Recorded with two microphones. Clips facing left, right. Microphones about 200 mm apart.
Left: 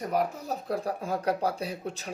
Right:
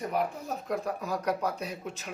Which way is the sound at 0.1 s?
35° left (ahead or behind).